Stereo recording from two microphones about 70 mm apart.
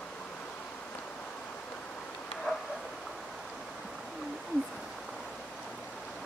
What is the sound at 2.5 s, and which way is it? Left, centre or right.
Bow-wow, centre.